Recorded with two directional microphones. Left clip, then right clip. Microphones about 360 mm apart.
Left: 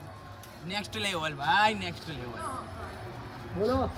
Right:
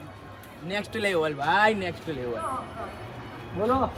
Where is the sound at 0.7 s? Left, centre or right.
Centre.